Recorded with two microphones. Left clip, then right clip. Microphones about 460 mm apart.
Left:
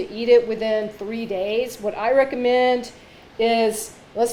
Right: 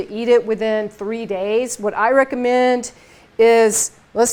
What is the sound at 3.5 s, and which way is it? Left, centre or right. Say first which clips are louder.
Speech: right 6 dB; right.